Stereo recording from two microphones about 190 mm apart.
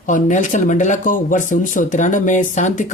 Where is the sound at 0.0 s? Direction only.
40° left (ahead or behind).